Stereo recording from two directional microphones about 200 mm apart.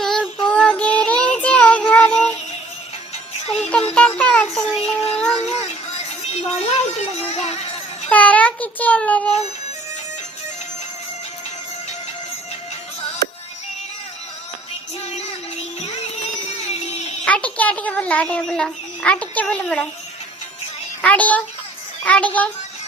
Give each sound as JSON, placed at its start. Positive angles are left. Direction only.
{"t": 0.0, "sound": "child singing", "side_deg": 5}
{"t": 3.4, "sound": "music", "side_deg": 30}
{"t": 3.7, "sound": "music", "side_deg": 5}
{"t": 4.9, "sound": "a sound", "side_deg": 5}
{"t": 6.2, "sound": "music", "side_deg": 30}
{"t": 8.1, "sound": "child singing", "side_deg": 5}
{"t": 16.6, "sound": "a sound", "side_deg": 30}
{"t": 17.2, "sound": "speech", "side_deg": 5}
{"t": 21.0, "sound": "speech", "side_deg": 5}